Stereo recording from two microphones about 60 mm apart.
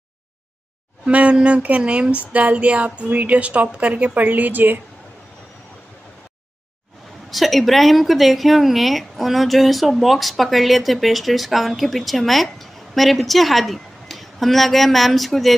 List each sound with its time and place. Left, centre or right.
1.0 s a woman's voice: centre
7.2 s speech: centre